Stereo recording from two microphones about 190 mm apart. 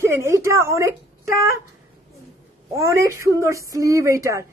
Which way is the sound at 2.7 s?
15° right (ahead or behind).